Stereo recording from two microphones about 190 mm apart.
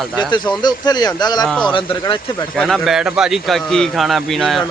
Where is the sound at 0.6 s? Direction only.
20° left (ahead or behind).